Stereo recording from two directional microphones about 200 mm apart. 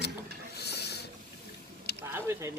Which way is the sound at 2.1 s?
10° right (ahead or behind).